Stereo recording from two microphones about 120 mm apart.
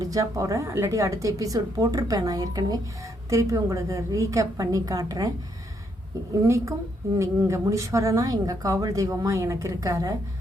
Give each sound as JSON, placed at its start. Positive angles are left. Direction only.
{"t": 0.0, "sound": "a woman's voice", "side_deg": -30}
{"t": 7.2, "sound": "a woman's voice", "side_deg": -25}